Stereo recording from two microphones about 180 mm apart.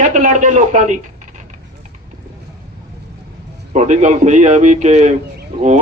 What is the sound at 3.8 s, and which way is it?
A man's voice, 40° right (ahead or behind).